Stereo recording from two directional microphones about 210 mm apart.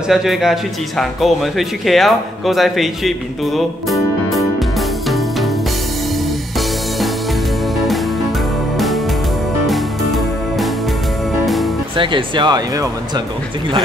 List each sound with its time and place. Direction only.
0.1 s speech: centre (ahead or behind)
8.7 s music: centre (ahead or behind)
12.0 s speech: 20° right (ahead or behind)